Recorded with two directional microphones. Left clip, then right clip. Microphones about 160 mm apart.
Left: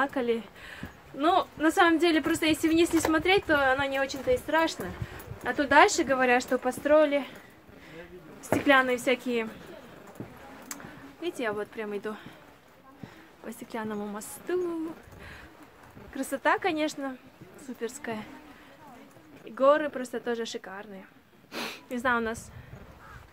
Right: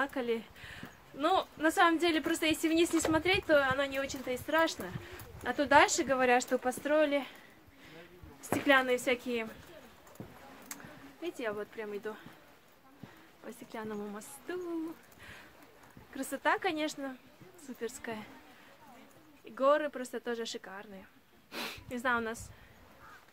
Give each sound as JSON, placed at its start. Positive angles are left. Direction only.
{"t": 0.0, "sound": "speech", "side_deg": 0}
{"t": 8.4, "sound": "speech", "side_deg": -10}
{"t": 11.2, "sound": "speech", "side_deg": 25}
{"t": 13.5, "sound": "a woman's voice", "side_deg": 35}
{"t": 16.1, "sound": "speech", "side_deg": -5}
{"t": 19.5, "sound": "speech", "side_deg": -5}
{"t": 21.5, "sound": "a sound", "side_deg": -5}